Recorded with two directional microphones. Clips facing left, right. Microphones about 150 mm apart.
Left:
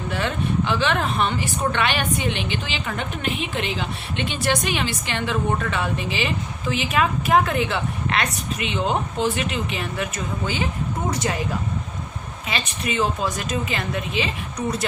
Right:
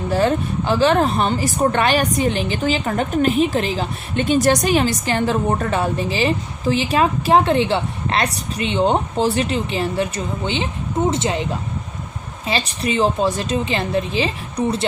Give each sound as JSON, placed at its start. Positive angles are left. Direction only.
{"t": 0.1, "sound": "a woman's voice", "side_deg": -40}
{"t": 12.5, "sound": "a woman's voice", "side_deg": -30}